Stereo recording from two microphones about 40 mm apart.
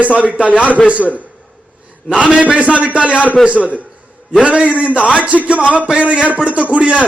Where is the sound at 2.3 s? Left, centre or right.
Right.